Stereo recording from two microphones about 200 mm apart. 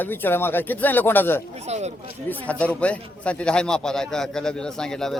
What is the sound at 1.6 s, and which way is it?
Speech, 35° right (ahead or behind).